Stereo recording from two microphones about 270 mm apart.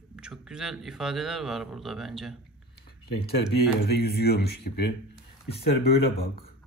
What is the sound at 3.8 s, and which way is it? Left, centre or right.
Speech, left.